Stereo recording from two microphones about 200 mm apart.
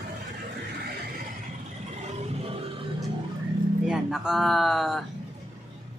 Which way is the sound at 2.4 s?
30° right (ahead or behind).